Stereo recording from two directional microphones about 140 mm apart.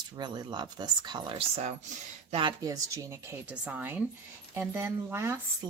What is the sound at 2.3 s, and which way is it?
Speech, 35° right (ahead or behind).